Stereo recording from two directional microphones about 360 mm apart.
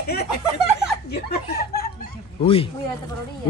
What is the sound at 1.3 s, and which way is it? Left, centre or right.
Speech, left.